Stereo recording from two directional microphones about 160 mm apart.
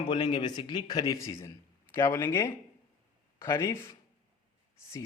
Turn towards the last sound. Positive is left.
turn(degrees=20)  # may be behind; listen again after turning